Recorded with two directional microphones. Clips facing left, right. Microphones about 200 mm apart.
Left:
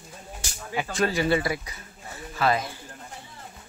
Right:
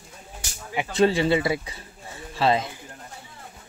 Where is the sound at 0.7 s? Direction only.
25° right (ahead or behind).